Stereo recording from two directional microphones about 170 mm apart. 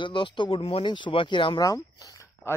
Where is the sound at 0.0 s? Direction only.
30° left (ahead or behind).